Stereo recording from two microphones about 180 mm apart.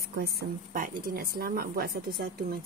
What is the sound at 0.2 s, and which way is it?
Speech, 60° right (ahead or behind).